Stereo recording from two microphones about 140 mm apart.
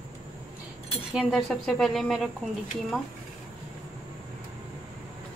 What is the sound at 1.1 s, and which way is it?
A woman's voice, centre (ahead or behind).